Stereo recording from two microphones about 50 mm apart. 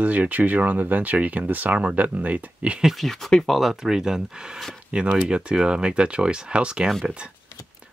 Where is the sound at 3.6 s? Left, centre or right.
Centre.